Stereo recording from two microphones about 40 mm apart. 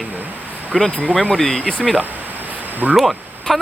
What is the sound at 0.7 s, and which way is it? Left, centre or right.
Speech, centre.